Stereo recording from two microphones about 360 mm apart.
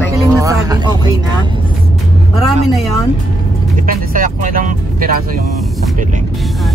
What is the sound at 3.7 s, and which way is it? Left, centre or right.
Speech, right.